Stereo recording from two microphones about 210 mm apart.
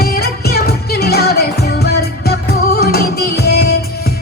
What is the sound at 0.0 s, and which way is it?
Music, 50° left (ahead or behind).